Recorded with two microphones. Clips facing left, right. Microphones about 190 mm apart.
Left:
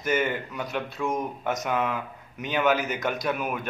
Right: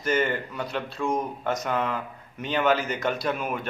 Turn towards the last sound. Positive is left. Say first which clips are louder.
# right 1 dB
turn(degrees=5)  # may be behind; listen again after turning